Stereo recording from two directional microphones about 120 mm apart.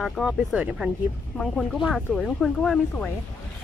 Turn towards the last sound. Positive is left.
turn(degrees=5)  # may be behind; listen again after turning